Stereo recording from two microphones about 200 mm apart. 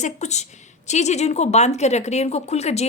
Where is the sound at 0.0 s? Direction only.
35° left (ahead or behind).